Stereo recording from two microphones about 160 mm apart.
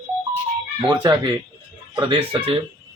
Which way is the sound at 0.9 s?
30° right (ahead or behind).